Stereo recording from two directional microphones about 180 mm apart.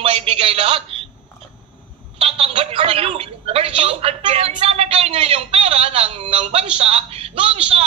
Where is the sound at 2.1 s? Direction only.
35° right (ahead or behind).